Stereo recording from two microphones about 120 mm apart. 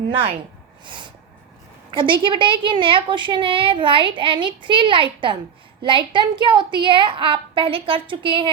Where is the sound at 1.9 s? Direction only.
40° right (ahead or behind).